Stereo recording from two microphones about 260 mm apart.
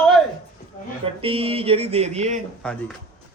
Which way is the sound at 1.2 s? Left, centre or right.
Right.